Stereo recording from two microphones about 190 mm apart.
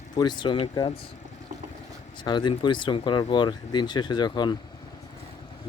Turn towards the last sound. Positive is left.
turn(degrees=25)  # may be behind; listen again after turning